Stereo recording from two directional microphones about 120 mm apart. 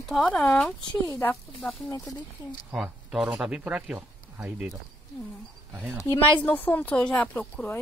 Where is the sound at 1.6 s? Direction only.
10° left (ahead or behind).